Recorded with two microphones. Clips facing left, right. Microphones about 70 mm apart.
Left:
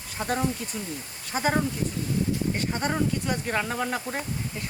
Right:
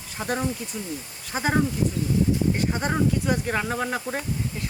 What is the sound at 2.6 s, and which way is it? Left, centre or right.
Speech, centre.